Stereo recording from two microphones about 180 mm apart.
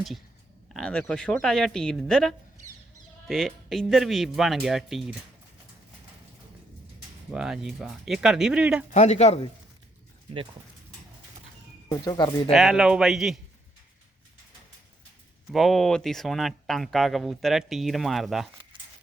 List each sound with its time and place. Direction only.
0.7 s speech: 5° left (ahead or behind)
7.3 s speech: 5° right (ahead or behind)
8.9 s speech: 40° left (ahead or behind)
11.9 s speech: 20° left (ahead or behind)
12.5 s speech: centre (ahead or behind)
15.4 s speech: centre (ahead or behind)